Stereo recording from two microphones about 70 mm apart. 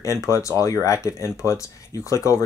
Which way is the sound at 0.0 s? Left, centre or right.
Left.